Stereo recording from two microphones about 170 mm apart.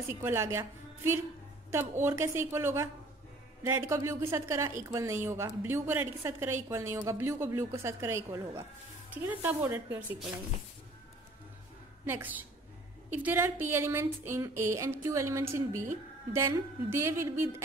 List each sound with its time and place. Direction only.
0.1 s a woman's voice: 15° right (ahead or behind)
12.0 s a woman's voice: 10° right (ahead or behind)